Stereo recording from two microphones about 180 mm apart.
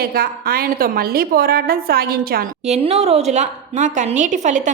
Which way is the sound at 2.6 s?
35° right (ahead or behind).